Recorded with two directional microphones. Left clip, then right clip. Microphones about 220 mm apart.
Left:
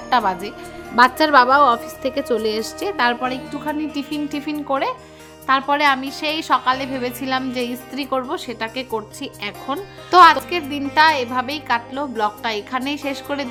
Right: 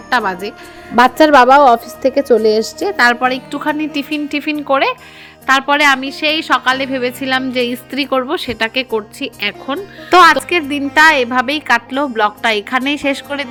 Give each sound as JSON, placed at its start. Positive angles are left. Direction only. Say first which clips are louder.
{"t": 0.1, "sound": "a woman's voice", "louder": "right 3 dB", "side_deg": -10}